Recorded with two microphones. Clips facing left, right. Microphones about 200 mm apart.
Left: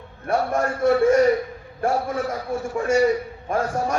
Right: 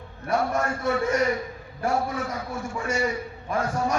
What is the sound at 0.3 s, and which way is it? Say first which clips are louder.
A man's voice: left 3 dB; 40° left (ahead or behind).